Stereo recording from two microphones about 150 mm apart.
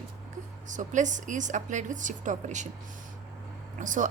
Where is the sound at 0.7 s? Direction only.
55° right (ahead or behind).